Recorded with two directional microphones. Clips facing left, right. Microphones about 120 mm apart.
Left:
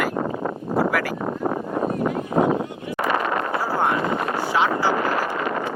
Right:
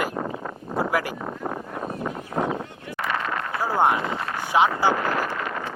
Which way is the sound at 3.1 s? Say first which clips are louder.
Left 5 dB; 20° left (ahead or behind).